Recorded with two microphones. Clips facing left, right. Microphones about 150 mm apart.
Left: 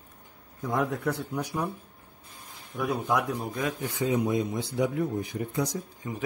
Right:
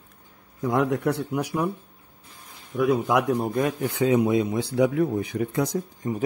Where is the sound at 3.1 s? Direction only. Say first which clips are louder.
Right 6 dB; 65° right (ahead or behind).